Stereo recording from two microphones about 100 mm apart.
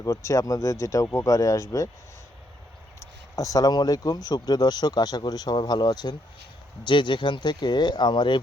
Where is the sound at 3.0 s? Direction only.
35° left (ahead or behind).